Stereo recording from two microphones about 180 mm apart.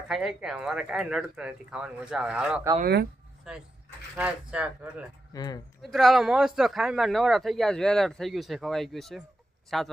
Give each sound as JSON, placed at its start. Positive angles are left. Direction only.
{"t": 0.1, "sound": "speech", "side_deg": 0}
{"t": 2.8, "sound": "speech", "side_deg": -60}
{"t": 3.5, "sound": "speech", "side_deg": 0}
{"t": 5.3, "sound": "speech", "side_deg": 20}
{"t": 5.8, "sound": "speech", "side_deg": 0}